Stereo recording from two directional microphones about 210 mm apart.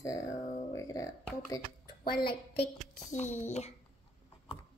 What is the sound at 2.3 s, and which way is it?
Child singing, 30° left (ahead or behind).